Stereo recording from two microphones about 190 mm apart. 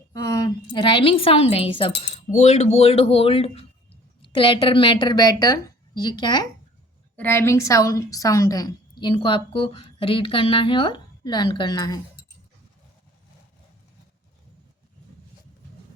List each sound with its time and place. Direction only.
0.1 s a woman's voice: 15° left (ahead or behind)